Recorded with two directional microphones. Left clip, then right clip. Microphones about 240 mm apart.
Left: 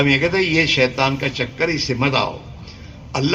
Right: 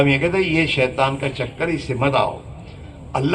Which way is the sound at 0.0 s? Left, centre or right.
Left.